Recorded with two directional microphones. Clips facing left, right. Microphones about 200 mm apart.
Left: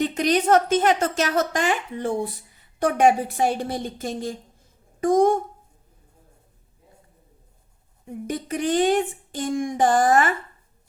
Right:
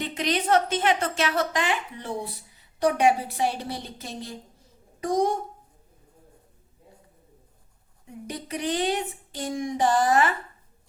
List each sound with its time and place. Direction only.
0.0 s a woman's voice: 45° left (ahead or behind)
8.3 s a woman's voice: 50° left (ahead or behind)